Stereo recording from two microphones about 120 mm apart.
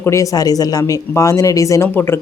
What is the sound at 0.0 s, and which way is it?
Speech, 25° left (ahead or behind).